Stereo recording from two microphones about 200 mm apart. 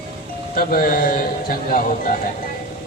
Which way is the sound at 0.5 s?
45° left (ahead or behind).